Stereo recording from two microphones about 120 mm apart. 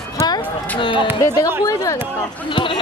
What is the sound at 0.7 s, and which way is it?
Speech, 45° left (ahead or behind).